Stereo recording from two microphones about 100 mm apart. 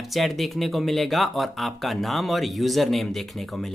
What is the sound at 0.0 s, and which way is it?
Speech, centre (ahead or behind).